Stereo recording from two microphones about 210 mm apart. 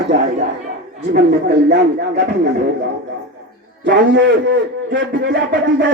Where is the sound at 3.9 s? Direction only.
55° right (ahead or behind).